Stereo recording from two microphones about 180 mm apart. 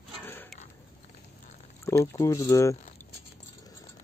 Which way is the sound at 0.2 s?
10° left (ahead or behind).